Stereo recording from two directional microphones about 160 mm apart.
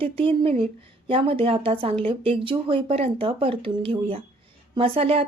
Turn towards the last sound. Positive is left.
turn(degrees=-35)  # may be behind; listen again after turning